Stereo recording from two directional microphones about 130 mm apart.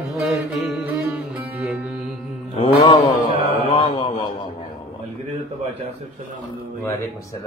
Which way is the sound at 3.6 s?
40° left (ahead or behind).